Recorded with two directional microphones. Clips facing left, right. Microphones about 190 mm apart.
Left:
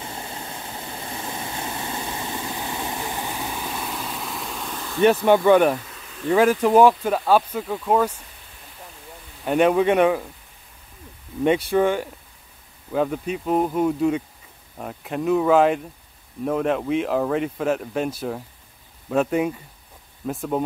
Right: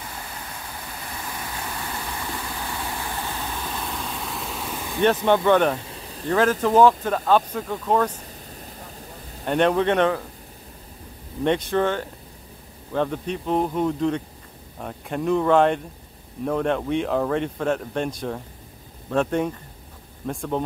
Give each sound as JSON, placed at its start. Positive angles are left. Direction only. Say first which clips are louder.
{"t": 0.0, "sound": "vehicle", "louder": "left 3 dB", "side_deg": 25}
{"t": 5.0, "sound": "speech", "louder": "left 3 dB", "side_deg": 10}
{"t": 5.8, "sound": "a sound", "louder": "right 3 dB", "side_deg": -30}
{"t": 6.2, "sound": "speech", "louder": "left 3 dB", "side_deg": 10}
{"t": 9.4, "sound": "speech", "louder": "left 2 dB", "side_deg": 5}
{"t": 11.4, "sound": "speech", "louder": "left 3 dB", "side_deg": 10}